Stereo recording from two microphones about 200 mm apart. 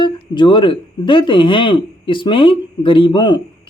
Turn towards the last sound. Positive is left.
turn(degrees=20)  # may be behind; listen again after turning